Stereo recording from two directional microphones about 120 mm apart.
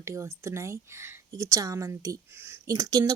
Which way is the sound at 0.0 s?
25° right (ahead or behind).